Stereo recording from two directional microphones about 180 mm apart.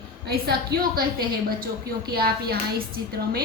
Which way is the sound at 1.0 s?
55° right (ahead or behind).